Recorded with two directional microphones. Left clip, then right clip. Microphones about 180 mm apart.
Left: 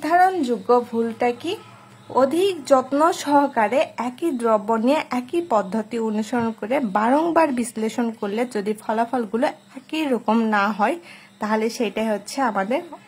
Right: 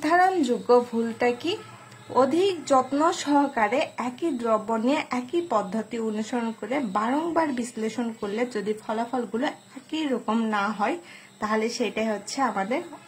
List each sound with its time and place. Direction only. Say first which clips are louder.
0.0 s a child's voice: left 3 dB; 20° left (ahead or behind)